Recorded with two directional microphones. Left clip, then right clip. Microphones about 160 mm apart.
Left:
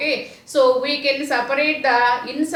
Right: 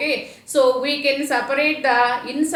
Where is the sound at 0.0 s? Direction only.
15° right (ahead or behind).